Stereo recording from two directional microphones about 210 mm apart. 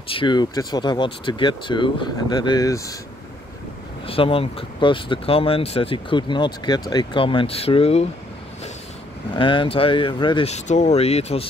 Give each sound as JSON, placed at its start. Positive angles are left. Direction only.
{"t": 0.1, "sound": "speech", "side_deg": 20}
{"t": 4.0, "sound": "speech", "side_deg": 25}
{"t": 9.3, "sound": "speech", "side_deg": 25}